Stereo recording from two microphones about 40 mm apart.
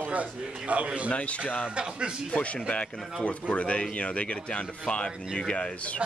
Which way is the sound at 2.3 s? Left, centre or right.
Left.